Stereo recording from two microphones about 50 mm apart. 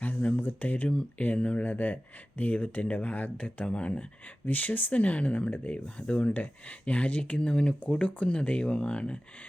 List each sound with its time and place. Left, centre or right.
0.0 s a sound: left
0.4 s speech: left
4.4 s speech: left